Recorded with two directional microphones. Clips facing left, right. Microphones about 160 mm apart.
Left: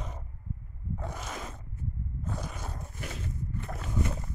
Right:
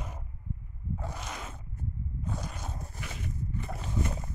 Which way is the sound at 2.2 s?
Centre (ahead or behind).